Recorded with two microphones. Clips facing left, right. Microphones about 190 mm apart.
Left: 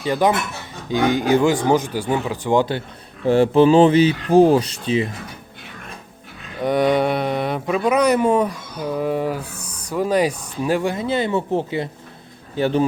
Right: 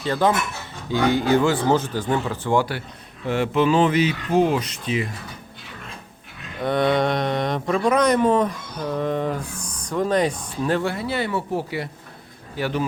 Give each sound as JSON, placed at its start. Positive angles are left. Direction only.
{"t": 0.0, "sound": "speech", "side_deg": 15}
{"t": 3.2, "sound": "speech", "side_deg": 30}
{"t": 6.6, "sound": "a man's voice", "side_deg": 10}